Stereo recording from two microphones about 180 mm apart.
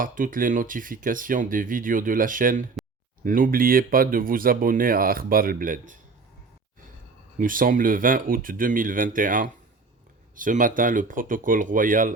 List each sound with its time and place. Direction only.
0.0 s speech: 50° right (ahead or behind)
7.3 s speech: 50° right (ahead or behind)